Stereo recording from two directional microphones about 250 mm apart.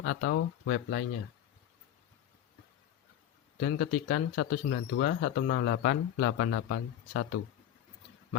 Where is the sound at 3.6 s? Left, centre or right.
Left.